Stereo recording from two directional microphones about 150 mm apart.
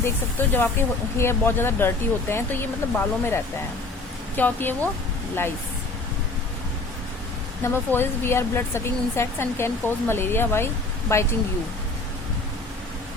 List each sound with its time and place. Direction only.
0.0 s speech: 15° left (ahead or behind)
7.6 s speech: 15° left (ahead or behind)